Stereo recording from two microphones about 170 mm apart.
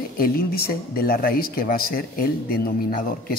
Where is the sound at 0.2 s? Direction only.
60° left (ahead or behind).